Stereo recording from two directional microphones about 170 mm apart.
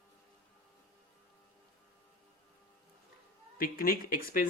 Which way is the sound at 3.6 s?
60° left (ahead or behind).